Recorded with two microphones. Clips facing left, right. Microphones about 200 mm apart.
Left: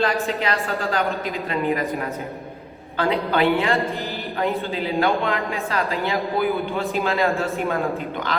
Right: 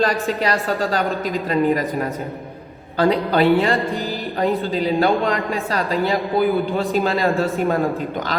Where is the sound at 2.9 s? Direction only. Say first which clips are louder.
Right 4 dB; 35° right (ahead or behind).